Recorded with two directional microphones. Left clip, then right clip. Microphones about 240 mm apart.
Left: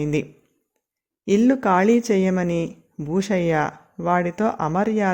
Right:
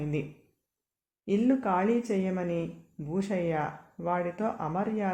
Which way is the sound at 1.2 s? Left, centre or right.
Left.